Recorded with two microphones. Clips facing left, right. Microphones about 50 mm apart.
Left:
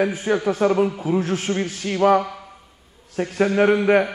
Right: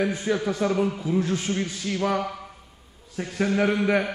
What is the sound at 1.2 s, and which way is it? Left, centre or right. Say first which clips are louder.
A man's voice: left 3 dB; left.